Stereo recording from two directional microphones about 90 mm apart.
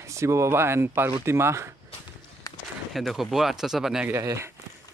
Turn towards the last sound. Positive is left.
turn(degrees=-30)  # may be behind; listen again after turning